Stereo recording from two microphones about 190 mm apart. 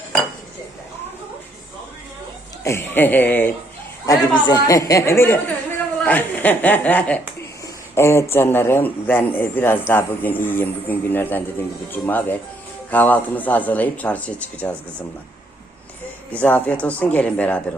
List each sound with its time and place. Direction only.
2.6 s a man's voice: 10° left (ahead or behind)
4.0 s a man's voice: 20° left (ahead or behind); by 15.0 s 5° left (ahead or behind)
16.3 s a man's voice: 10° left (ahead or behind)